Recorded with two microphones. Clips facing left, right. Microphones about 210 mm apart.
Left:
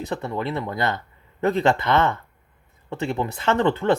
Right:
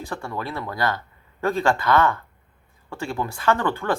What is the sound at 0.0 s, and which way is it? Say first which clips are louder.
Speech: left 4 dB; 20° left (ahead or behind).